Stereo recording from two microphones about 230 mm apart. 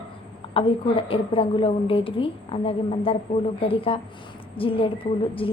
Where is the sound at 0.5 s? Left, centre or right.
Left.